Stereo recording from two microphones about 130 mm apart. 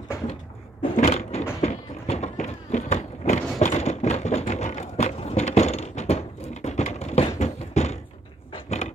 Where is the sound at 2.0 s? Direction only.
60° left (ahead or behind).